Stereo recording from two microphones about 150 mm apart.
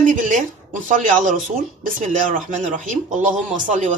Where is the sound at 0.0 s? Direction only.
60° right (ahead or behind).